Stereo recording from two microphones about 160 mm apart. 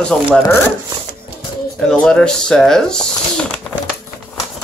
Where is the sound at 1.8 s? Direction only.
5° left (ahead or behind).